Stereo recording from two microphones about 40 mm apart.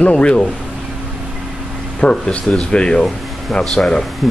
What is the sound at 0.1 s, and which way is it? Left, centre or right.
Speech, left.